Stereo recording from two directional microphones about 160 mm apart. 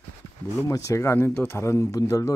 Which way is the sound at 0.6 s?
20° left (ahead or behind).